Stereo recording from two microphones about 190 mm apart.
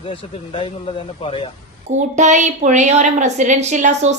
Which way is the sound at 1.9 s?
40° right (ahead or behind).